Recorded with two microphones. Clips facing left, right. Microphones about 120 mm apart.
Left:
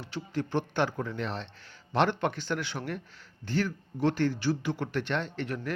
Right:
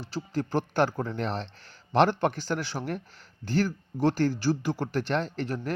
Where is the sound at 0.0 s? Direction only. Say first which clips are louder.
Right 2 dB; 35° right (ahead or behind).